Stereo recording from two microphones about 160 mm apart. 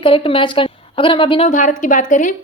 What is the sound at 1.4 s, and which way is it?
Speech, 50° left (ahead or behind).